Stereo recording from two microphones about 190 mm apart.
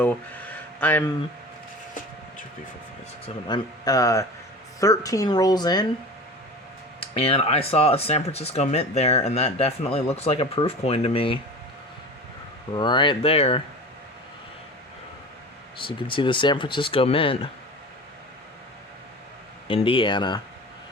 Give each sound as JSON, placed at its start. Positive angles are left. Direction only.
{"t": 0.0, "sound": "a sound", "side_deg": 10}
{"t": 3.4, "sound": "speech", "side_deg": 20}
{"t": 7.0, "sound": "speech", "side_deg": 30}
{"t": 12.7, "sound": "speech", "side_deg": 25}
{"t": 15.8, "sound": "speech", "side_deg": 25}
{"t": 19.6, "sound": "speech", "side_deg": 25}